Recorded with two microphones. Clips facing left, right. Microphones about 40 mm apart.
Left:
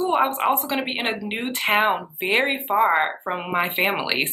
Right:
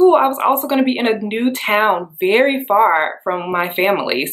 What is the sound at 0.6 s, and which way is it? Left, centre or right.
Speech, centre.